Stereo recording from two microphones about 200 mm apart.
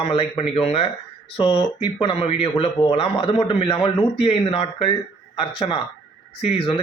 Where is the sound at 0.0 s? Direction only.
30° left (ahead or behind).